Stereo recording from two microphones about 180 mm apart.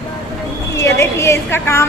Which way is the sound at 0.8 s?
15° left (ahead or behind).